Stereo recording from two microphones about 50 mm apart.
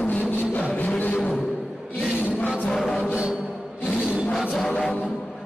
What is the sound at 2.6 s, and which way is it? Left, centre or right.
Music, centre.